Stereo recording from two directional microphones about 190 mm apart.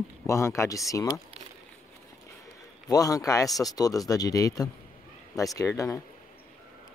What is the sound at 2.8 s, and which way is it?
Speech, 20° left (ahead or behind).